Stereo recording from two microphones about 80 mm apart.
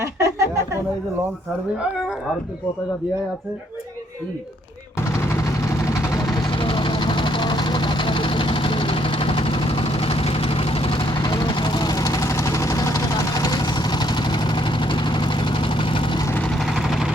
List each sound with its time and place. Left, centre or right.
0.0 s a sound: right
6.5 s vehicle: left
11.0 s vehicle: left
11.9 s vehicle: left